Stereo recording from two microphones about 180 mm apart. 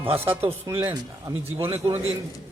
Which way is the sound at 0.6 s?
20° right (ahead or behind).